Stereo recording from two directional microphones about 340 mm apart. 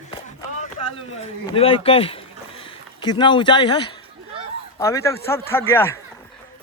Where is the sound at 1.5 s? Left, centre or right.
Centre.